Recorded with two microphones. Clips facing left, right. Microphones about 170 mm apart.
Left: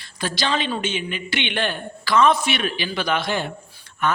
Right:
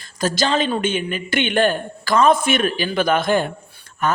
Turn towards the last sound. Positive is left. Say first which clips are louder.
# right 2 dB
turn(degrees=-45)  # may be behind; listen again after turning